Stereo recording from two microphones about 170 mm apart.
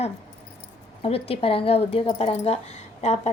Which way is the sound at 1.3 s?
35° left (ahead or behind).